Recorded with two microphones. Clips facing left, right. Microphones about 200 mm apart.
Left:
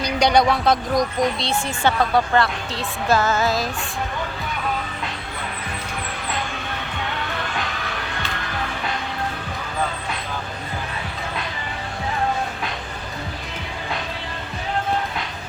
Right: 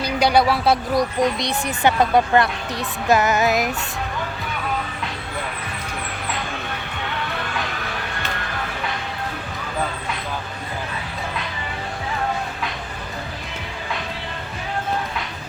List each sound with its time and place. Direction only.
0.0 s speech: 5° right (ahead or behind)